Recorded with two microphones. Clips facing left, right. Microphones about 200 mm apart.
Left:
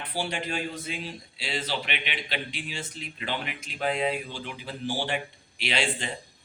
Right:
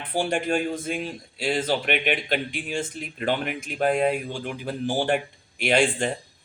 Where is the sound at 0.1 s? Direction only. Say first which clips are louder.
Right 8 dB; 50° right (ahead or behind).